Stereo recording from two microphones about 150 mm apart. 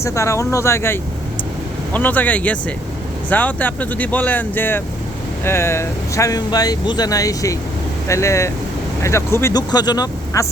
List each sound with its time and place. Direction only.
0.0 s speech: 20° left (ahead or behind)